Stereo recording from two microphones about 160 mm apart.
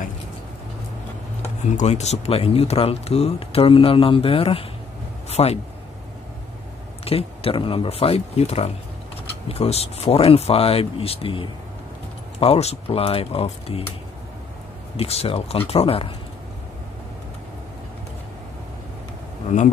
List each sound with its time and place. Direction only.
1.4 s speech: 45° left (ahead or behind)
7.1 s speech: 35° left (ahead or behind)
15.0 s speech: 40° left (ahead or behind)
19.5 s a man's voice: 45° left (ahead or behind)